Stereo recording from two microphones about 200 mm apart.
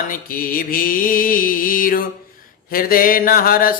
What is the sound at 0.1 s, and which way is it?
Mantra, 45° left (ahead or behind).